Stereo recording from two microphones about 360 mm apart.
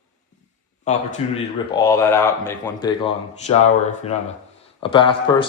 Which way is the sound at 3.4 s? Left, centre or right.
Centre.